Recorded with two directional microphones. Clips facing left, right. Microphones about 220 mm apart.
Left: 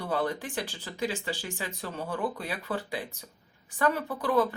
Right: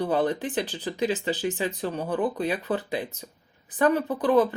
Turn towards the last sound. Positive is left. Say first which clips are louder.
# right 5 dB
turn(degrees=-20)  # may be behind; listen again after turning